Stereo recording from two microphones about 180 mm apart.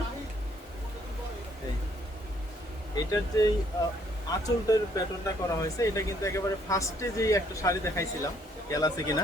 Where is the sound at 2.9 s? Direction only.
20° left (ahead or behind).